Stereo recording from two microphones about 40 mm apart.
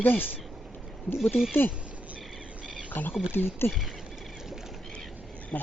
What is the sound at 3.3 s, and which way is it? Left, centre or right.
Speech, left.